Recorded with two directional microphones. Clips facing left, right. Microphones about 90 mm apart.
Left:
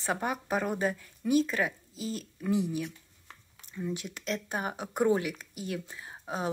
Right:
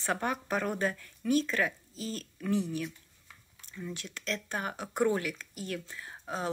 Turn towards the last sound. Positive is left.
turn(degrees=15)  # may be behind; listen again after turning